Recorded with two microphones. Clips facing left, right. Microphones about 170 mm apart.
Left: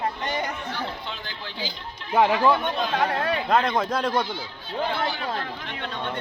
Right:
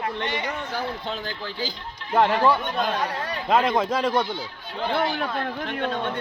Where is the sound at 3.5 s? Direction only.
Centre (ahead or behind).